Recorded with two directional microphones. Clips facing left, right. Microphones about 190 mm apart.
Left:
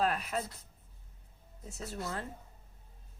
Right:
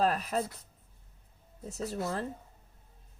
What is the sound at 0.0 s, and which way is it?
Speech, 40° right (ahead or behind).